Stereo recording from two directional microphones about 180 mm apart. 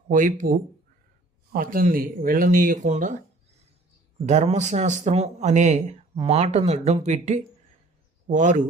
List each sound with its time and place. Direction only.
0.1 s speech: 45° right (ahead or behind)
4.3 s speech: 40° right (ahead or behind)